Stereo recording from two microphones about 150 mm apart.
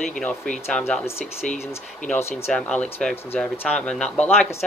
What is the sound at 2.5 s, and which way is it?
Speech, 5° left (ahead or behind).